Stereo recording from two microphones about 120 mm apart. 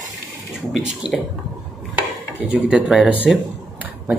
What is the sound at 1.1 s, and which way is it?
Speech, 5° left (ahead or behind).